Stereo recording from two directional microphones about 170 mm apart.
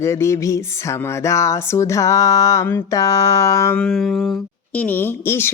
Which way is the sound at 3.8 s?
Centre (ahead or behind).